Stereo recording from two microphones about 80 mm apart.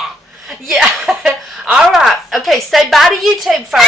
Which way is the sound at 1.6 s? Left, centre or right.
Centre.